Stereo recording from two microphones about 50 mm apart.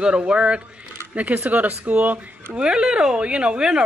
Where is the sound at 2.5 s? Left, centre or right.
Centre.